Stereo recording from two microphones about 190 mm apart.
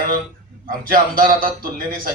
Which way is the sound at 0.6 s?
50° right (ahead or behind).